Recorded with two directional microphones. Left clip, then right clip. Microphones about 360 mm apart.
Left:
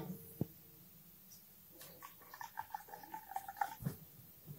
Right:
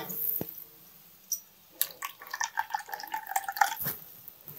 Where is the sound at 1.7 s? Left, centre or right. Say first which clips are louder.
Right 18 dB; centre.